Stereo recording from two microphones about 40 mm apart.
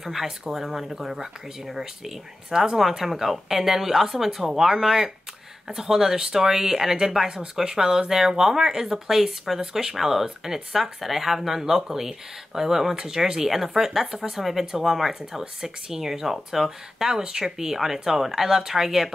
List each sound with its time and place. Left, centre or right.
0.0 s speech: centre
17.1 s speech: centre